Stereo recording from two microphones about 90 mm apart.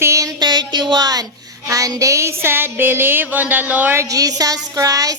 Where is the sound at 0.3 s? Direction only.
55° right (ahead or behind); by 4.0 s 20° right (ahead or behind).